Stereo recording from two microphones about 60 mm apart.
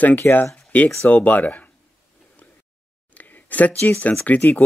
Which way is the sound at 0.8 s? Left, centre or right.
Left.